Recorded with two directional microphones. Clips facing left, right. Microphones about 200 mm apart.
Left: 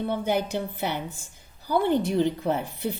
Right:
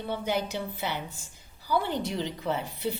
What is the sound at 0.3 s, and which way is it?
Speech, 55° left (ahead or behind).